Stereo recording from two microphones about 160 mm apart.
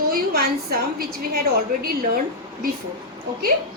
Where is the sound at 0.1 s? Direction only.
70° right (ahead or behind).